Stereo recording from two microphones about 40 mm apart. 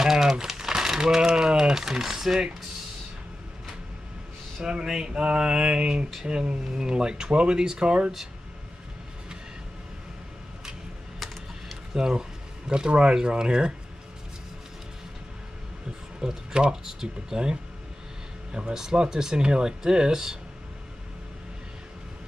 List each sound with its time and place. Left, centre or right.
0.0 s speech: centre
4.6 s speech: centre
11.9 s speech: centre
16.2 s speech: centre